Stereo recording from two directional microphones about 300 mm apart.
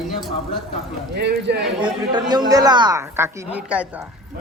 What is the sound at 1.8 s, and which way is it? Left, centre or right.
A woman's voice, centre.